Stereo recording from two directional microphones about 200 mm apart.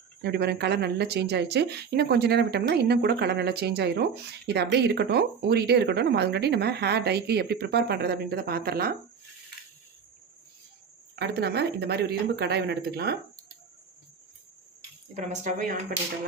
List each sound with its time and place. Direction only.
0.2 s speech: 55° right (ahead or behind)
11.2 s speech: 55° right (ahead or behind)
15.1 s speech: 35° right (ahead or behind)